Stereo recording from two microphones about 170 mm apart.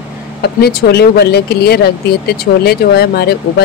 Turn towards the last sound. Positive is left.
turn(degrees=70)  # may be behind; listen again after turning